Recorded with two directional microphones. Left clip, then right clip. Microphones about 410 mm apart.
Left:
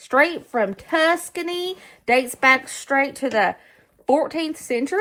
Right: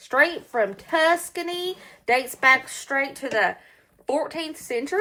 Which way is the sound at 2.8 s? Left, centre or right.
Left.